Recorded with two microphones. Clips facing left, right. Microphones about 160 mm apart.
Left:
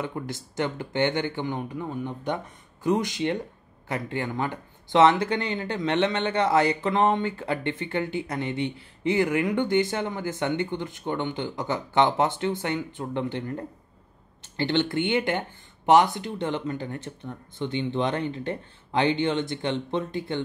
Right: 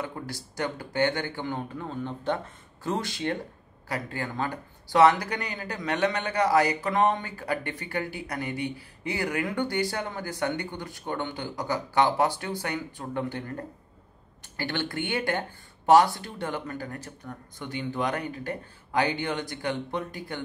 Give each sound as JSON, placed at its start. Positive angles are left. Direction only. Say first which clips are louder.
{"t": 0.0, "sound": "speech", "louder": "left 3 dB", "side_deg": 20}